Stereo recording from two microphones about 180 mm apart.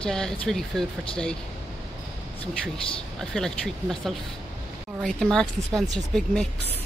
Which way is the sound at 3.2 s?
5° left (ahead or behind).